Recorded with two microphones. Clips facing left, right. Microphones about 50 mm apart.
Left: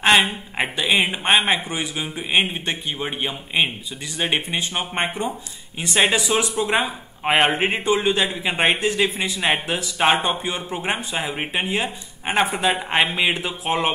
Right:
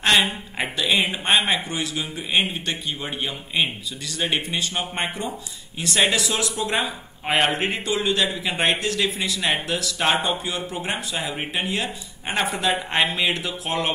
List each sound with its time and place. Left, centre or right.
0.6 s speech: centre